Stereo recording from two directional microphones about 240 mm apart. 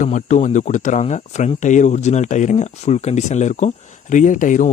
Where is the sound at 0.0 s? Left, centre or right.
Left.